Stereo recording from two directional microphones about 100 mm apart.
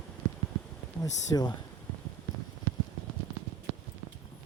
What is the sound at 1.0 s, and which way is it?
Speech, 40° left (ahead or behind).